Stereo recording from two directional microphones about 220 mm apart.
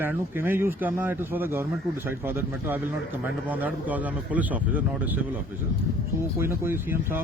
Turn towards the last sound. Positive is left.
turn(degrees=-10)  # may be behind; listen again after turning